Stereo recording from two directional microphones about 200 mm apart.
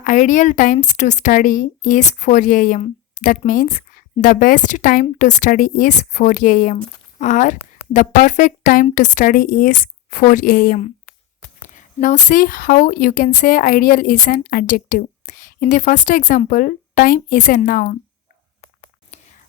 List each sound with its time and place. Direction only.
0.0 s a woman's voice: 40° left (ahead or behind)
19.1 s whispering: 35° left (ahead or behind)